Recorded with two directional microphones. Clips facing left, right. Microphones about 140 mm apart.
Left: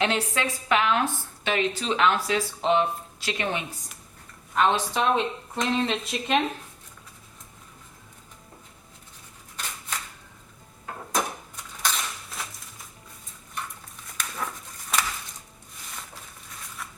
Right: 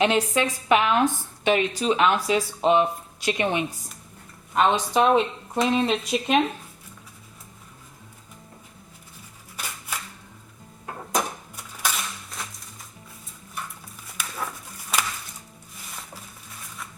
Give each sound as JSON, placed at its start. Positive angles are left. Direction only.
{"t": 0.0, "sound": "speech", "side_deg": -15}
{"t": 11.5, "sound": "typewriter", "side_deg": -5}
{"t": 14.2, "sound": "a sound", "side_deg": -5}